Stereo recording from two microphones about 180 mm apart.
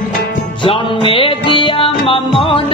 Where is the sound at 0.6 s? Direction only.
30° left (ahead or behind).